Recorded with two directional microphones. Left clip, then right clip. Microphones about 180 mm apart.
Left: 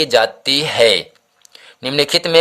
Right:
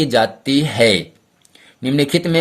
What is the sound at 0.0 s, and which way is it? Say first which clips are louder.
Speech: left 2 dB; 30° left (ahead or behind).